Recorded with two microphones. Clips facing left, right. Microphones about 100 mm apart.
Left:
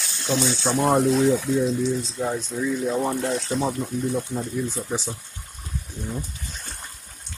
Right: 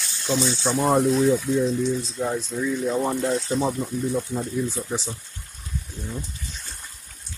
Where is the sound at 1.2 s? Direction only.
90° left.